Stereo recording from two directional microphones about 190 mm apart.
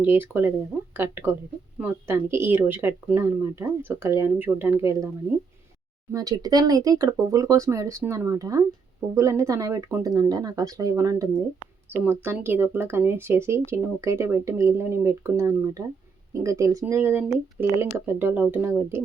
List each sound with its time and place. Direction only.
0.0 s speech: 10° right (ahead or behind)
6.1 s speech: 20° right (ahead or behind)